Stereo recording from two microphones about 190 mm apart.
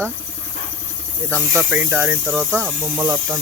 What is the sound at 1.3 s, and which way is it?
Speech, 15° right (ahead or behind).